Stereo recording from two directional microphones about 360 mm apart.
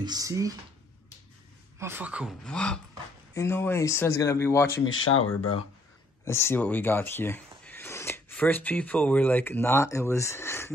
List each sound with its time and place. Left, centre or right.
0.0 s speech: centre
1.8 s speech: centre
5.1 s speech: left
6.2 s speech: centre